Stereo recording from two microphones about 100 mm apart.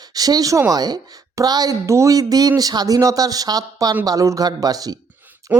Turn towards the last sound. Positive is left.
turn(degrees=-20)  # may be behind; listen again after turning